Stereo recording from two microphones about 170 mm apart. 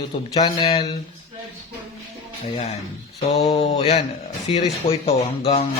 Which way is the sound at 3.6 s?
40° left (ahead or behind).